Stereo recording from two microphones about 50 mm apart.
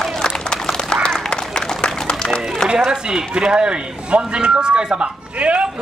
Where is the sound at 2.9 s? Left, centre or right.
Centre.